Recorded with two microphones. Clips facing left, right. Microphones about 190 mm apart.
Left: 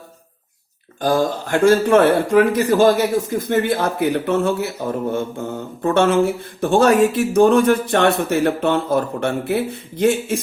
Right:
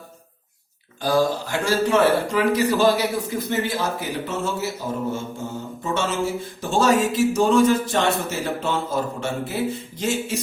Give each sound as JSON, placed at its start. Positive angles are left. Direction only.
{"t": 1.0, "sound": "a man's voice", "side_deg": 55}